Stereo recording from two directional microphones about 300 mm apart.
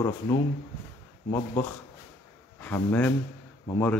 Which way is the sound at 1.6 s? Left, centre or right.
Centre.